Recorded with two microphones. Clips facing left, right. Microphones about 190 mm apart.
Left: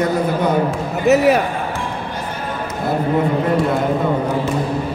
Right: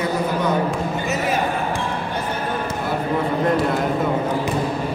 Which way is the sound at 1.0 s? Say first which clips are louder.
Left 14 dB; 65° left (ahead or behind).